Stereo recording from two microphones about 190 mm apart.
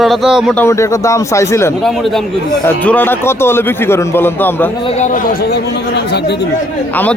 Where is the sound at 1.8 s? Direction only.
Centre (ahead or behind).